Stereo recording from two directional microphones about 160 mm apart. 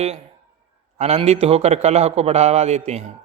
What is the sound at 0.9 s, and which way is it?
A man's voice, 40° right (ahead or behind).